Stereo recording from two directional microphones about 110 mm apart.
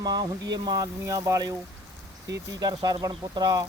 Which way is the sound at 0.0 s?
40° right (ahead or behind).